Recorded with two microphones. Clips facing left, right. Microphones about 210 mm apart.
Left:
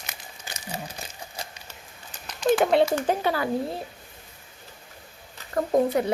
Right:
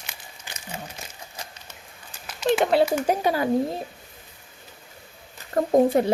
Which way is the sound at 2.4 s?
5° right (ahead or behind).